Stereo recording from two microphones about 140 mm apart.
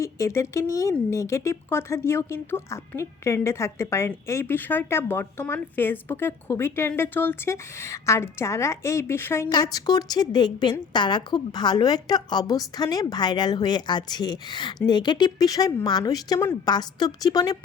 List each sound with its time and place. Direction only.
0.0 s speech: 20° left (ahead or behind)
9.7 s speech: 30° left (ahead or behind)